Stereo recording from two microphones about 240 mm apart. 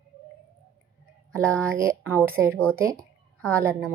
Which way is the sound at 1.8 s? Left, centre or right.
Centre.